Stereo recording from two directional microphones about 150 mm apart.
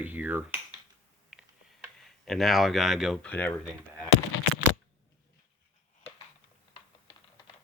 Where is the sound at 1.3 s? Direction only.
5° right (ahead or behind).